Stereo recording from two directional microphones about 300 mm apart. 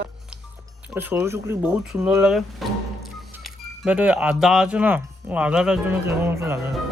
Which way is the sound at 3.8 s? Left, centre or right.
Centre.